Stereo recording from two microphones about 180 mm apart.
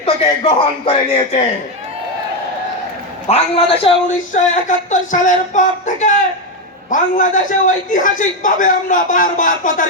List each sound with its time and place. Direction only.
0.0 s speech: 30° left (ahead or behind)
3.2 s speech: 35° left (ahead or behind)
4.3 s a man's voice: 45° left (ahead or behind)